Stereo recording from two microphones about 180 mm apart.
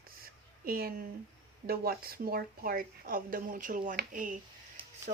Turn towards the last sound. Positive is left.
turn(degrees=-45)  # may be behind; listen again after turning